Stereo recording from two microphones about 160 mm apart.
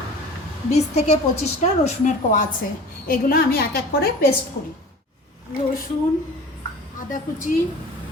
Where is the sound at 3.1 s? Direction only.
70° left (ahead or behind).